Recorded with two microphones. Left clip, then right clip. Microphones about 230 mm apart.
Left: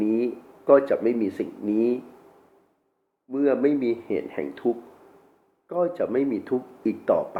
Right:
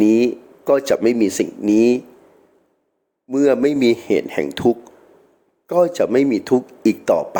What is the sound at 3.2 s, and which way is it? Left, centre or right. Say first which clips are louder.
Speech: right 6 dB; right.